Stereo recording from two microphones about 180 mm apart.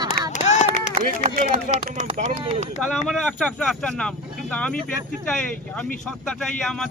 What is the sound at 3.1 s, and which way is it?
Speech, 5° left (ahead or behind).